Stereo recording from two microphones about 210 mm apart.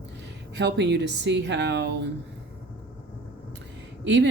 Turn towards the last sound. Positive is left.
turn(degrees=-60)  # may be behind; listen again after turning